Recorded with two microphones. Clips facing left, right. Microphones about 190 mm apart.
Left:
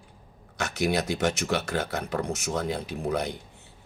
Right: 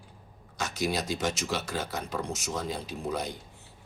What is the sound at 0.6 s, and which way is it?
A man's voice, 65° left (ahead or behind).